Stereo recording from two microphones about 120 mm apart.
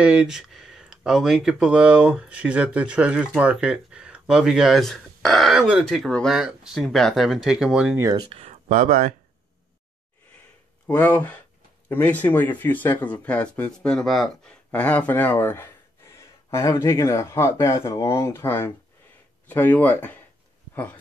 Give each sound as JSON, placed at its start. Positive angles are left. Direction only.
{"t": 0.0, "sound": "speech", "side_deg": -10}
{"t": 8.3, "sound": "a sound", "side_deg": -60}
{"t": 10.9, "sound": "speech", "side_deg": 15}